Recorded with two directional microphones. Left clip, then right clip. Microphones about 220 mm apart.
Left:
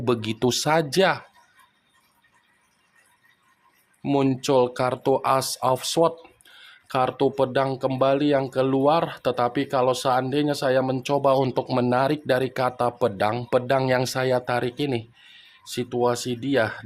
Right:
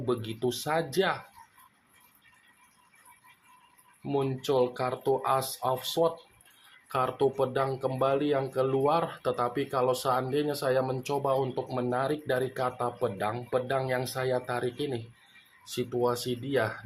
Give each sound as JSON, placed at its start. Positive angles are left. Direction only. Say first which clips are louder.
{"t": 0.0, "sound": "speech", "louder": "left 7 dB", "side_deg": 45}
{"t": 4.0, "sound": "speech", "louder": "left 7 dB", "side_deg": 50}